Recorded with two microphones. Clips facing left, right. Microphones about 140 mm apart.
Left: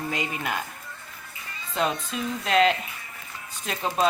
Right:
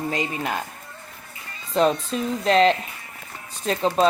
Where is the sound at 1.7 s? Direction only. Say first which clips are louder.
Right 7 dB; 35° right (ahead or behind).